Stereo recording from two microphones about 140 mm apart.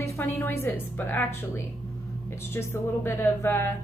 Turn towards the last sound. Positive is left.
turn(degrees=15)  # may be behind; listen again after turning